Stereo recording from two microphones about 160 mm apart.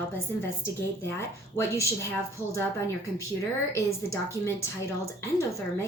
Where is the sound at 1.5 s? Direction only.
20° left (ahead or behind).